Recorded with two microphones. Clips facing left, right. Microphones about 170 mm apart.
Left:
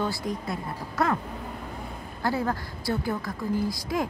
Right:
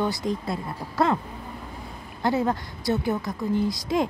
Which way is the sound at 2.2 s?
20° right (ahead or behind).